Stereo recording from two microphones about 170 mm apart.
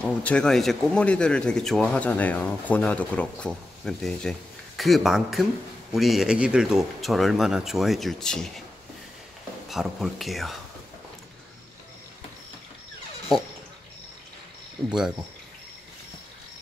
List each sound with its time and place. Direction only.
0.0 s speech: 5° left (ahead or behind)
9.7 s speech: centre (ahead or behind)
14.9 s speech: 5° right (ahead or behind)